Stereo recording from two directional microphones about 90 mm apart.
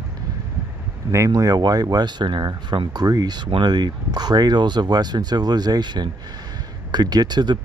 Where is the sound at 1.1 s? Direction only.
35° right (ahead or behind).